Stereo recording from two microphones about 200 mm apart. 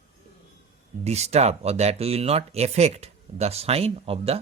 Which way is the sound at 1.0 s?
35° right (ahead or behind).